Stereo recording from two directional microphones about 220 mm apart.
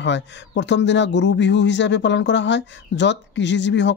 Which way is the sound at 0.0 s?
55° left (ahead or behind).